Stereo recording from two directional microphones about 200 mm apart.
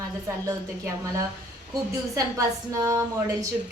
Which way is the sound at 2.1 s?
15° right (ahead or behind).